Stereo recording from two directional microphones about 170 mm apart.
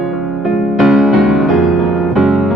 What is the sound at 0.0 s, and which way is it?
Music, centre (ahead or behind).